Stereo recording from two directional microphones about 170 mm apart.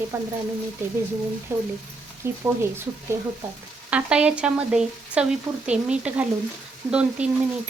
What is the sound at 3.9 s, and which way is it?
Speech, 5° right (ahead or behind).